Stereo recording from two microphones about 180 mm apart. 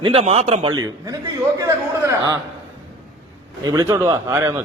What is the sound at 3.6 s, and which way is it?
Speech, 20° right (ahead or behind).